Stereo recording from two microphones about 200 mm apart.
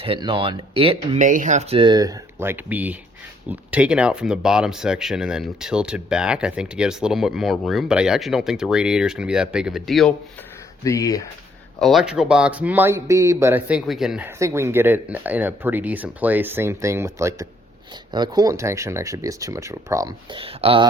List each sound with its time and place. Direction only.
0.0 s speech: 25° right (ahead or behind)
1.2 s speech: 40° right (ahead or behind); by 10.1 s centre (ahead or behind)
10.8 s speech: 15° left (ahead or behind)
11.8 s speech: centre (ahead or behind); by 20.8 s 30° right (ahead or behind)